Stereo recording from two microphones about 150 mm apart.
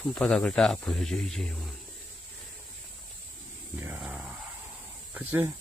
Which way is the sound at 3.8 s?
10° right (ahead or behind).